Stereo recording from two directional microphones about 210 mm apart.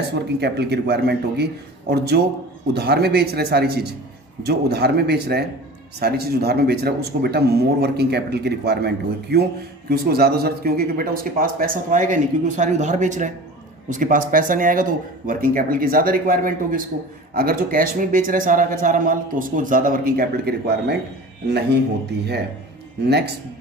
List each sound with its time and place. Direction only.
0.1 s speech: 50° right (ahead or behind)